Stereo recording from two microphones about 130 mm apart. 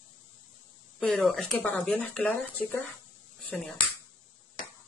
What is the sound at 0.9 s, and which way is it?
Speech, 10° left (ahead or behind).